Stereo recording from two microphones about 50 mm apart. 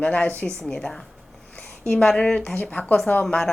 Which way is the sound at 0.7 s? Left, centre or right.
Centre.